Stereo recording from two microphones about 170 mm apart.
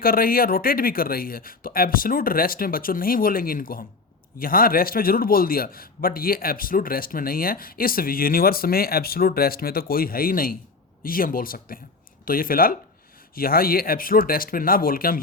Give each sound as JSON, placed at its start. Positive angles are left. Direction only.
{"t": 0.0, "sound": "a man's voice", "side_deg": 60}